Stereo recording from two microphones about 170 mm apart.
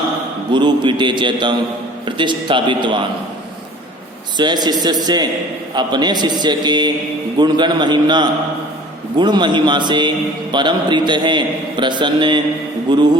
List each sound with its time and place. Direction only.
0.5 s a man's voice: 30° right (ahead or behind)
4.4 s a man's voice: 25° right (ahead or behind)